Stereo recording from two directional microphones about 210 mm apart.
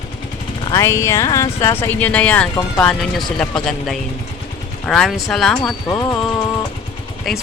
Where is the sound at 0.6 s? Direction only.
15° left (ahead or behind).